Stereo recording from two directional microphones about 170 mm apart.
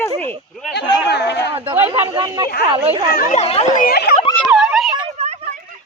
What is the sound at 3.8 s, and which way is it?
Speech, 65° left (ahead or behind).